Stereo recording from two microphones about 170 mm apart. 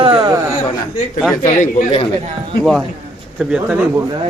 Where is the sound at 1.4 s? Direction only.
50° left (ahead or behind).